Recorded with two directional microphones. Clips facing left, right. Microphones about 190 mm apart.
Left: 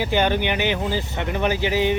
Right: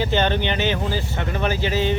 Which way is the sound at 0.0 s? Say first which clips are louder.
Even; 10° left (ahead or behind).